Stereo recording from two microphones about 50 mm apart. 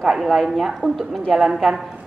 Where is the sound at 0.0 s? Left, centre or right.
Centre.